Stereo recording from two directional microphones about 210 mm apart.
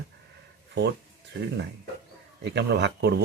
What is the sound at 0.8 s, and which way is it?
Speech, 55° right (ahead or behind).